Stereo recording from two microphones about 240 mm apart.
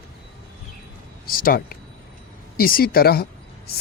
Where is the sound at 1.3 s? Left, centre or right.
Left.